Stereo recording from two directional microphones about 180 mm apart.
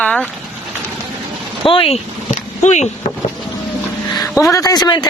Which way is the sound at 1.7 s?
30° left (ahead or behind).